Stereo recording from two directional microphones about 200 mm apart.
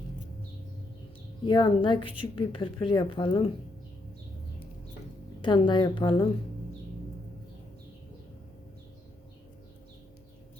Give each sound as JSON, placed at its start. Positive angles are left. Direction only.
{"t": 1.5, "sound": "a woman's voice", "side_deg": 25}
{"t": 5.4, "sound": "a woman's voice", "side_deg": 25}